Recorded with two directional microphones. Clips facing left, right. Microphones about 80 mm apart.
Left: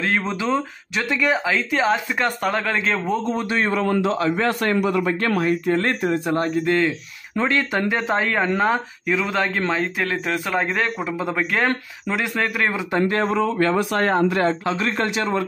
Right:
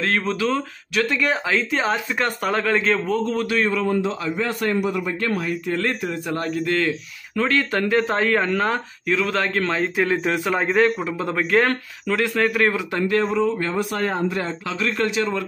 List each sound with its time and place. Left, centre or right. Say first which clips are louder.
0.2 s speech: even; centre
1.2 s speech: left 1 dB; centre
3.1 s speech: right 1 dB; left
3.8 s a man's voice: left 2 dB; left
5.4 s speech: left 4 dB; left; by 12.7 s centre
13.0 s speech: right 1 dB; left
13.3 s a man's voice: left 2 dB; left
14.7 s speech: left 1 dB; left